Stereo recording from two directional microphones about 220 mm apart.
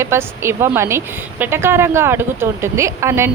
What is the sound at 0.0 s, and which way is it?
A woman's voice, 10° right (ahead or behind).